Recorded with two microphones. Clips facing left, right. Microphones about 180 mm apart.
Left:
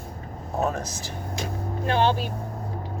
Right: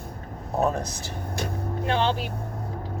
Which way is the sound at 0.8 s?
60° right (ahead or behind).